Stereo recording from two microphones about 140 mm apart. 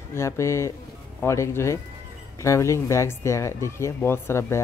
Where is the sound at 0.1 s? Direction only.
20° left (ahead or behind).